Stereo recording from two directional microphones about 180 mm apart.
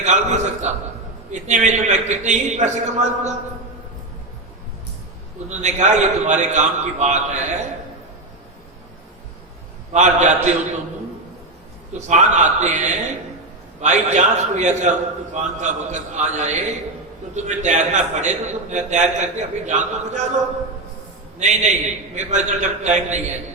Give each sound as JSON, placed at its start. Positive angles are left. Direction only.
{"t": 0.0, "sound": "a man's voice", "side_deg": -40}
{"t": 5.5, "sound": "a man's voice", "side_deg": -40}
{"t": 9.9, "sound": "a man's voice", "side_deg": -40}
{"t": 11.9, "sound": "a man's voice", "side_deg": -40}
{"t": 21.3, "sound": "a man's voice", "side_deg": -40}